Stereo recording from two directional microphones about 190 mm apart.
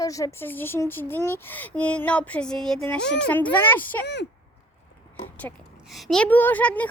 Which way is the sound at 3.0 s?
65° left (ahead or behind).